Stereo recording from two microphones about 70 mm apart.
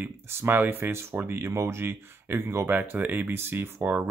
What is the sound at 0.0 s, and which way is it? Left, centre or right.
Speech, right.